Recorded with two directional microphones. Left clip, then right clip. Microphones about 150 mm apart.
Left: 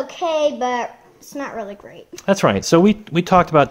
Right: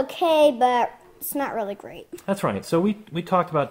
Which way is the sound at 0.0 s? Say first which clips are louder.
Right 1 dB; 90° right.